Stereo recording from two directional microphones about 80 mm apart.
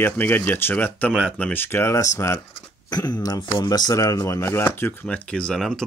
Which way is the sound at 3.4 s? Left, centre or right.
Left.